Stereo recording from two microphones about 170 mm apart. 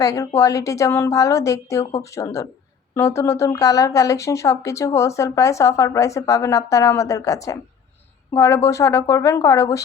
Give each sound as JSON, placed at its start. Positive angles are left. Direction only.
{"t": 0.0, "sound": "speech", "side_deg": 20}